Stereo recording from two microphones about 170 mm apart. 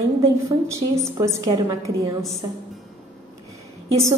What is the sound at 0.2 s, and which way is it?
A woman's voice, 20° right (ahead or behind).